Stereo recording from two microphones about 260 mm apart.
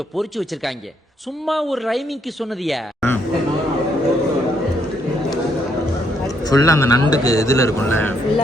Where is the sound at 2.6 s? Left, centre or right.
Centre.